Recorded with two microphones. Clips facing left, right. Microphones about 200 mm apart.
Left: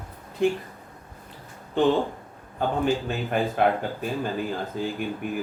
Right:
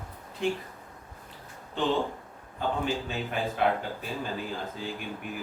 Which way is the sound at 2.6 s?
50° left (ahead or behind).